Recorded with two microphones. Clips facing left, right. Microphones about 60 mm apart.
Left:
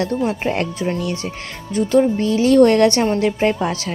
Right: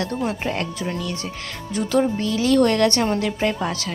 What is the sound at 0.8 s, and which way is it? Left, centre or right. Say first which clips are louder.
Speech: left 5 dB; centre.